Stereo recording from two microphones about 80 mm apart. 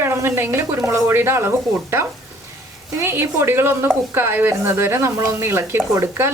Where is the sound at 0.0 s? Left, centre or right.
Right.